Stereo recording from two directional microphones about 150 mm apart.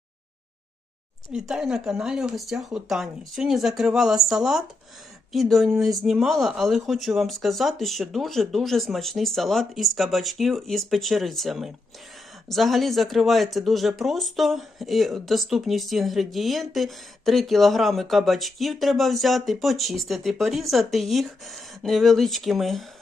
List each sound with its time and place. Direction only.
1.3 s speech: 5° right (ahead or behind)